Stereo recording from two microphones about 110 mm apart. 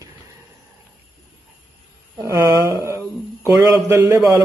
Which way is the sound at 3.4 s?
30° right (ahead or behind).